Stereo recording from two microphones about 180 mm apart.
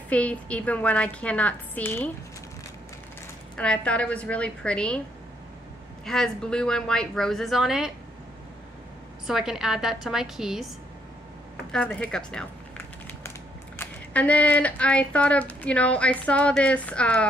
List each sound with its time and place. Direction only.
0.1 s speech: 5° left (ahead or behind)
3.5 s speech: 5° left (ahead or behind)
6.0 s a woman's voice: centre (ahead or behind)
9.3 s a woman's voice: 5° right (ahead or behind)
11.7 s a woman's voice: 10° left (ahead or behind)
13.7 s speech: 10° left (ahead or behind)